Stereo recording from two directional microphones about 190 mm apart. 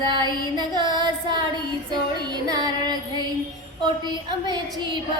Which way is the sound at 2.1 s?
20° right (ahead or behind).